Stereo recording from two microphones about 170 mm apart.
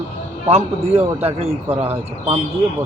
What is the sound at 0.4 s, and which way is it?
Speech, 35° right (ahead or behind).